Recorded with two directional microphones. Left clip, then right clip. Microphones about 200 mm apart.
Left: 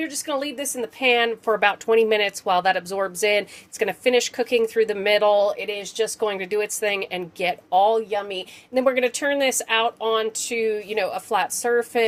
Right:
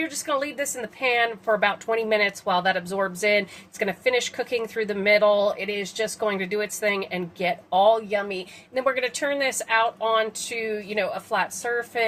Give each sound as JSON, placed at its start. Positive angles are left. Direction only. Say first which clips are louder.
{"t": 0.0, "sound": "a woman's voice", "louder": "even", "side_deg": 40}